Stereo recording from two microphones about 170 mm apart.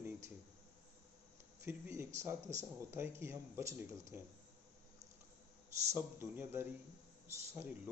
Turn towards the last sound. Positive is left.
turn(degrees=-15)  # may be behind; listen again after turning